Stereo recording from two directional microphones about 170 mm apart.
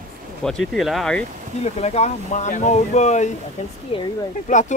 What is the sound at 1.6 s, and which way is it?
Speech, 40° left (ahead or behind).